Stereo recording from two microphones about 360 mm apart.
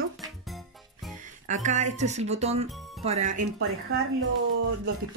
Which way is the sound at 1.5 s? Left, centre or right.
Centre.